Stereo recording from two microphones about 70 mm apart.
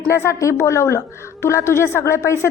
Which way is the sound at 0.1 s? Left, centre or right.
Left.